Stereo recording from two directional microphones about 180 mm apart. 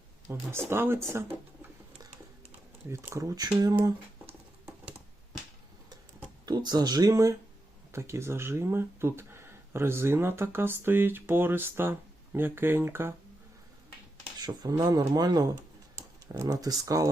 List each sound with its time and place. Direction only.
0.3 s speech: 15° right (ahead or behind)
2.9 s speech: 15° right (ahead or behind)
6.4 s speech: 25° right (ahead or behind)
14.3 s speech: 20° right (ahead or behind)